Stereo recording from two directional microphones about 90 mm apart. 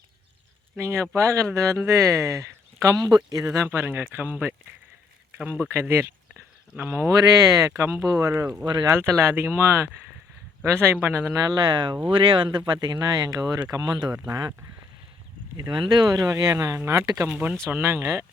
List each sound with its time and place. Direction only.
0.8 s speech: 30° right (ahead or behind)
2.9 s speech: 50° right (ahead or behind)
3.5 s speech: 30° right (ahead or behind)
6.7 s speech: 25° right (ahead or behind)
7.1 s speech: 40° right (ahead or behind)
8.6 s speech: 55° right (ahead or behind)
8.9 s speech: 30° right (ahead or behind)
11.3 s speech: 50° right (ahead or behind)
15.7 s speech: 55° right (ahead or behind); by 17.1 s 30° right (ahead or behind)
17.2 s speech: 15° right (ahead or behind)
17.7 s speech: 25° right (ahead or behind)